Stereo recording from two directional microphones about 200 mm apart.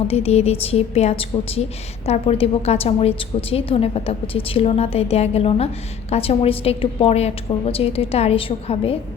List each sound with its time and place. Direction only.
0.1 s a woman's voice: 30° left (ahead or behind)